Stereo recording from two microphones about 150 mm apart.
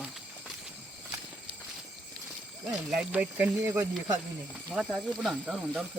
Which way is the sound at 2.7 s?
5° right (ahead or behind).